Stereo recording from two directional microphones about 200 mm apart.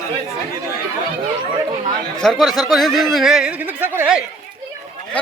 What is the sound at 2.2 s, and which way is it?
Speech, 5° left (ahead or behind).